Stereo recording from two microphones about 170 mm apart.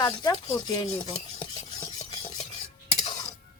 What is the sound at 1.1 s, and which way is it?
Stir, 35° left (ahead or behind).